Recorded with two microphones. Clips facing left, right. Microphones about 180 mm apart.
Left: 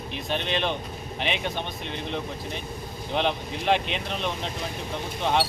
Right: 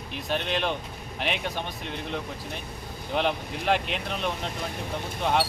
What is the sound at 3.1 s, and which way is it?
Speech, 5° right (ahead or behind).